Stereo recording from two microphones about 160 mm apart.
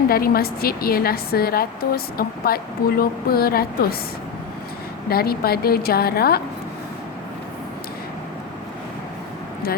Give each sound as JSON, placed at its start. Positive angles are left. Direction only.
{"t": 0.1, "sound": "a woman's voice", "side_deg": 70}
{"t": 5.0, "sound": "a woman's voice", "side_deg": 70}